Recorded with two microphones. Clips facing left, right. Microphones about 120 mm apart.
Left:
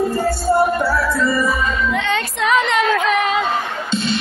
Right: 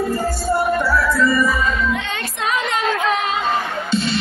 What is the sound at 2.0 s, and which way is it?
Music, 75° left (ahead or behind).